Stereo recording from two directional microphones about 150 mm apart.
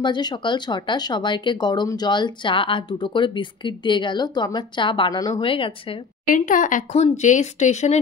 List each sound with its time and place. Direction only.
0.0 s speech: 30° left (ahead or behind)
5.4 s speech: 35° left (ahead or behind)
6.2 s speech: 65° left (ahead or behind)